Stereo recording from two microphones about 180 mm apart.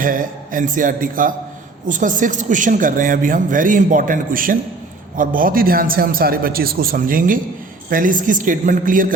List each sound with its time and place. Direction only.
0.0 s a man's voice: 50° right (ahead or behind)